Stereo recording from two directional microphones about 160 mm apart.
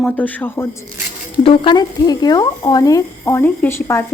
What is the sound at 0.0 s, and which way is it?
Speech, 10° left (ahead or behind).